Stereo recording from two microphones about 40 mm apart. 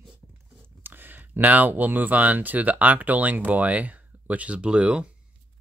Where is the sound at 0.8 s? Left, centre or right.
Right.